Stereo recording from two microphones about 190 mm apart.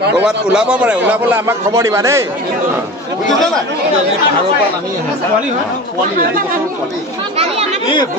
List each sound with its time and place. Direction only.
0.2 s a man's voice: 5° right (ahead or behind)
7.8 s speech: 25° left (ahead or behind)